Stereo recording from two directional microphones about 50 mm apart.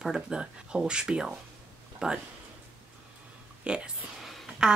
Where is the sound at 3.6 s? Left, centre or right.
Centre.